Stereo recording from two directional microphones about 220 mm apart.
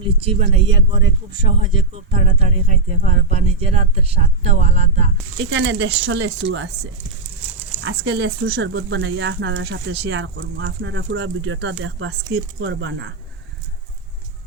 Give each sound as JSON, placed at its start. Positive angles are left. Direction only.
{"t": 0.0, "sound": "speech", "side_deg": -25}
{"t": 5.5, "sound": "speech", "side_deg": -60}
{"t": 7.8, "sound": "speech", "side_deg": -50}